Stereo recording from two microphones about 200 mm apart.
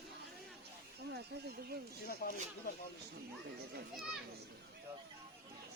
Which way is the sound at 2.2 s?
45° left (ahead or behind).